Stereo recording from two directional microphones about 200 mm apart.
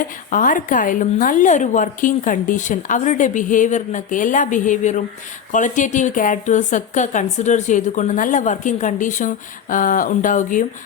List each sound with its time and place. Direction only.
0.0 s a woman's voice: 40° left (ahead or behind)